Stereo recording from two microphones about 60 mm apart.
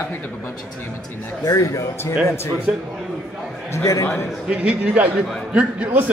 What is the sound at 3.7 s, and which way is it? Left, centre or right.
Speech, left.